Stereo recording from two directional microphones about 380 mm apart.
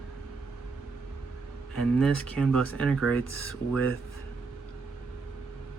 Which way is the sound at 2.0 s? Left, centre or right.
Centre.